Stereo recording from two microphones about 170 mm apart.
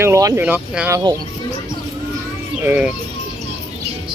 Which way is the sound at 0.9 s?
20° right (ahead or behind).